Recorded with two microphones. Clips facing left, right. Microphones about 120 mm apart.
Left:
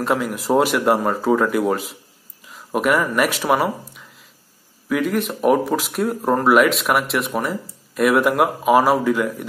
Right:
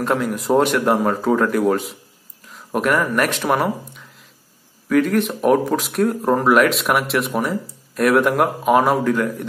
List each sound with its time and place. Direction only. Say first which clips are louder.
0.0 s speech: right 1 dB; centre (ahead or behind)